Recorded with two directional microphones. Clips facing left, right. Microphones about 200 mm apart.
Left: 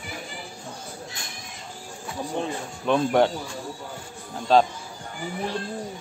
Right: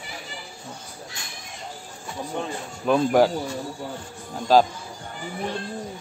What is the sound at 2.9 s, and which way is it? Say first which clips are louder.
Speech: right 2 dB; 5° right (ahead or behind).